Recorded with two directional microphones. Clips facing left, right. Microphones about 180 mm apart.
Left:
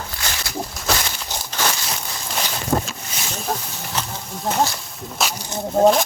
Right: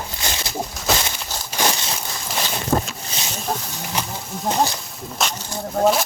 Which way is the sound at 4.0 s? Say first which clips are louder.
Right 1 dB; 10° right (ahead or behind).